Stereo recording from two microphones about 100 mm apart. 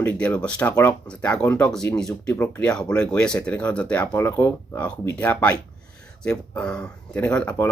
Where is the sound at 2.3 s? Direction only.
25° left (ahead or behind).